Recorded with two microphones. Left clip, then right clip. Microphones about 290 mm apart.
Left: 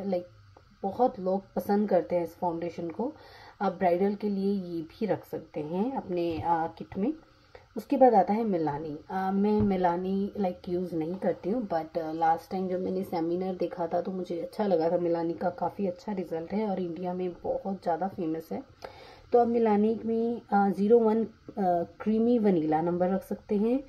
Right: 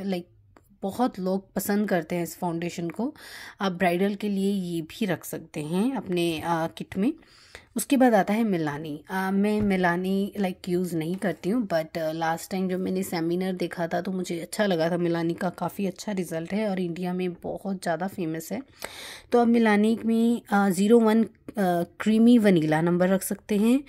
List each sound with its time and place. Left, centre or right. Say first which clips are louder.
0.9 s a woman's voice: left 1 dB; right